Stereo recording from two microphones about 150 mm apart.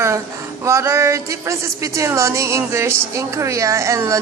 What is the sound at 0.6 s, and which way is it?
A woman's voice, 20° right (ahead or behind).